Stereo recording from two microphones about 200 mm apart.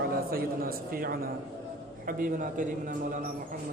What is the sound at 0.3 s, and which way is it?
A man's voice, 45° right (ahead or behind).